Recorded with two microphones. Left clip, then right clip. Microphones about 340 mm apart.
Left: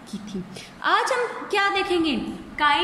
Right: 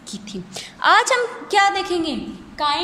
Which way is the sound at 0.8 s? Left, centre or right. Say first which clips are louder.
Right 6 dB; right.